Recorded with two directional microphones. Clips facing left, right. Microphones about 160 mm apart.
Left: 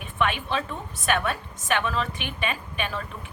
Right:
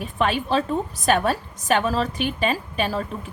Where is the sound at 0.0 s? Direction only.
35° right (ahead or behind).